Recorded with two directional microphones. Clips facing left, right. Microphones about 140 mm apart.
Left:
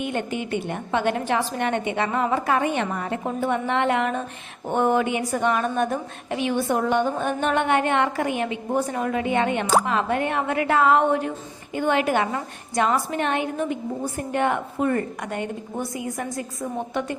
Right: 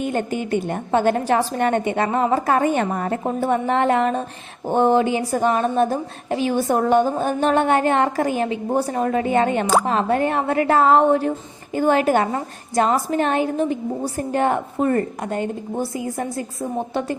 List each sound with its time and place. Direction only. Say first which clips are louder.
0.0 s a woman's voice: right 4 dB; 40° right (ahead or behind)